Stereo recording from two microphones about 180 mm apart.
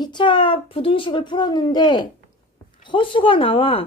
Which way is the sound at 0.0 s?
25° left (ahead or behind).